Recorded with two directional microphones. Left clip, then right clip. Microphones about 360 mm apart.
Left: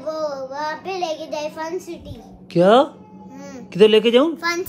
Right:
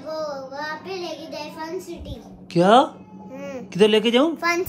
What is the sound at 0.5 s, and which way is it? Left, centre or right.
Child singing, centre.